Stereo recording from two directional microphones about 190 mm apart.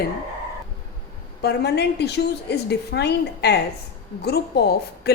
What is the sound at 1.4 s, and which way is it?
A woman's voice, 60° left (ahead or behind).